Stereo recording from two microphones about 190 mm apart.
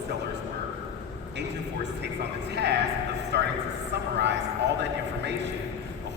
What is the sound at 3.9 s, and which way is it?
Speech, 65° right (ahead or behind).